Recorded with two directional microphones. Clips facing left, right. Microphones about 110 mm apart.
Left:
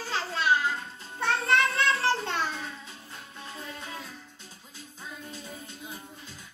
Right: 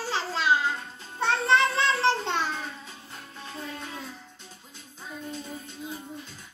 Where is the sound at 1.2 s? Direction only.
30° right (ahead or behind).